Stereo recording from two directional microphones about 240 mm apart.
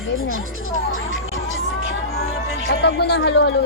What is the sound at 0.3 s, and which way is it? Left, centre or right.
Speech, left.